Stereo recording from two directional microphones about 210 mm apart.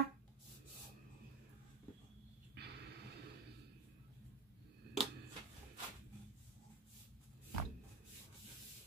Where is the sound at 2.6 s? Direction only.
50° right (ahead or behind).